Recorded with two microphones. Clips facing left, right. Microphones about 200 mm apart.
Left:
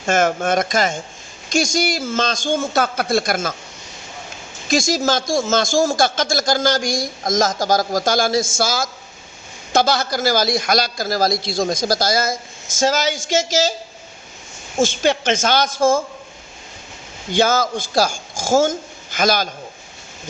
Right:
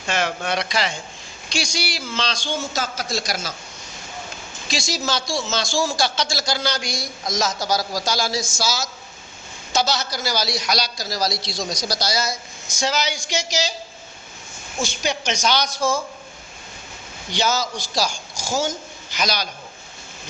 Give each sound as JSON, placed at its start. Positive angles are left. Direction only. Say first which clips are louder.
{"t": 0.0, "sound": "a man's voice", "louder": "left 7 dB", "side_deg": 45}
{"t": 4.7, "sound": "a man's voice", "louder": "left 8 dB", "side_deg": 50}
{"t": 15.0, "sound": "a man's voice", "louder": "left 6 dB", "side_deg": 55}
{"t": 17.3, "sound": "a man's voice", "louder": "left 6 dB", "side_deg": 50}